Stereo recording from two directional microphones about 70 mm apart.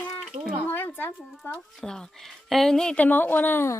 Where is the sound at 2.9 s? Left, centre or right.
Left.